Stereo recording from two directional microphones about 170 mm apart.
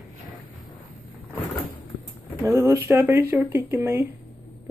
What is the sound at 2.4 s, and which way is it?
Speech, 15° right (ahead or behind).